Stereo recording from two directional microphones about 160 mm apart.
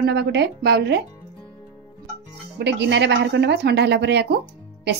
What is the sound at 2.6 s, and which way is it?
Speech, 90° right.